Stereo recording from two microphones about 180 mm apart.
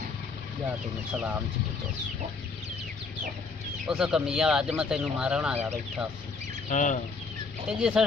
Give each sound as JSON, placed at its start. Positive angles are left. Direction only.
{"t": 1.1, "sound": "speech", "side_deg": -5}
{"t": 3.8, "sound": "speech", "side_deg": -5}
{"t": 6.7, "sound": "speech", "side_deg": 45}
{"t": 7.7, "sound": "speech", "side_deg": -5}